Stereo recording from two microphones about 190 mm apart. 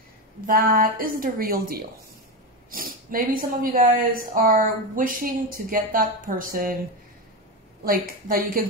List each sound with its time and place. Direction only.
0.5 s speech: 50° right (ahead or behind)
8.3 s speech: 50° right (ahead or behind)